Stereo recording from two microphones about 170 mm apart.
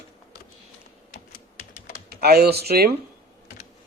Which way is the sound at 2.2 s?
70° right (ahead or behind).